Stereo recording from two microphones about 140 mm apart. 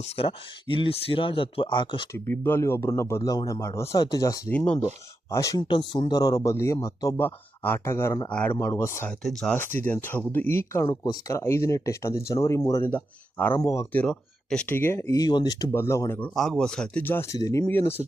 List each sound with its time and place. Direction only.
0.0 s speech: 45° left (ahead or behind)
2.1 s speech: 15° left (ahead or behind)
4.5 s speech: 10° left (ahead or behind)
5.3 s speech: 25° left (ahead or behind)
7.2 s speech: 15° left (ahead or behind)
8.3 s speech: 5° left (ahead or behind)
8.5 s speech: 20° left (ahead or behind)
9.0 s speech: 5° left (ahead or behind); by 10.8 s 20° left (ahead or behind)
10.8 s speech: 30° left (ahead or behind); by 13.5 s 10° left (ahead or behind)
13.5 s speech: 25° left (ahead or behind)
14.0 s speech: 5° left (ahead or behind); by 15.6 s 30° left (ahead or behind)
15.7 s speech: 20° left (ahead or behind)
16.3 s speech: centre (ahead or behind)